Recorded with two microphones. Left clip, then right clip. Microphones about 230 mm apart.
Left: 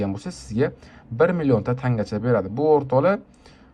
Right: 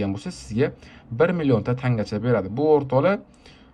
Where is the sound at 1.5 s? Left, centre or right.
Right.